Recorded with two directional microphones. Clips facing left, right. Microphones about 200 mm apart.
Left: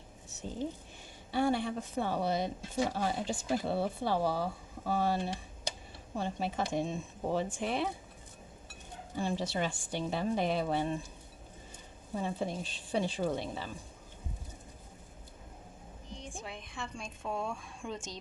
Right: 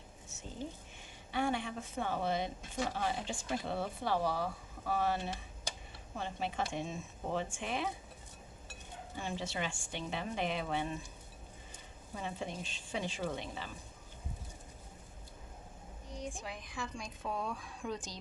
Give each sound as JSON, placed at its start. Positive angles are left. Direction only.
{"t": 1.3, "sound": "speech", "side_deg": 35}
{"t": 9.1, "sound": "speech", "side_deg": 35}
{"t": 12.2, "sound": "speech", "side_deg": 40}
{"t": 16.2, "sound": "a woman's voice", "side_deg": 0}
{"t": 17.9, "sound": "a woman's voice", "side_deg": 25}